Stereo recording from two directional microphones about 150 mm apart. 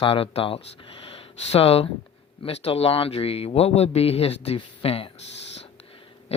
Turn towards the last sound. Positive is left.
turn(degrees=45)  # may be behind; listen again after turning